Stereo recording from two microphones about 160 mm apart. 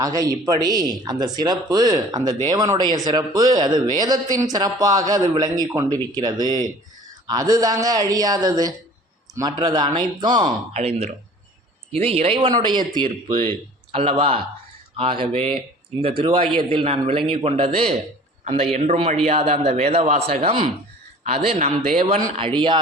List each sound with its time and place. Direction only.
0.0 s speech: 20° right (ahead or behind)
10.8 s a man's voice: 40° right (ahead or behind)
22.4 s a man's voice: 30° right (ahead or behind)